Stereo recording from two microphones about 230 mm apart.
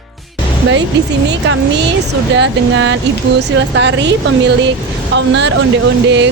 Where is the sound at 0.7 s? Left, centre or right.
Right.